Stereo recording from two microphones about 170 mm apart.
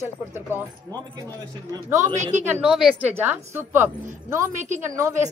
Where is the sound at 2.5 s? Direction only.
5° right (ahead or behind).